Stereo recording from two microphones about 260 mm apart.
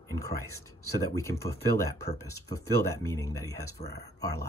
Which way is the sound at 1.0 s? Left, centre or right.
Centre.